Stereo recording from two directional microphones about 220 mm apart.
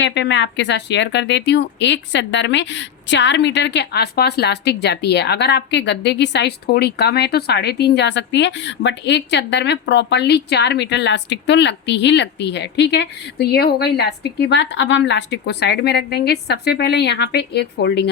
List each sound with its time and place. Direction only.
0.0 s speech: 55° left (ahead or behind)